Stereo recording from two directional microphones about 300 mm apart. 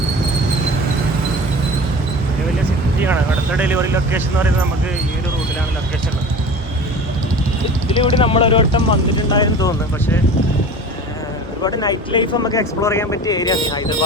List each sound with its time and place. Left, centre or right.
3.6 s speech: centre
7.9 s speech: centre
11.6 s speech: centre